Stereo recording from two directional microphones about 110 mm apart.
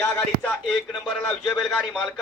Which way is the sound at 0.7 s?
5° left (ahead or behind).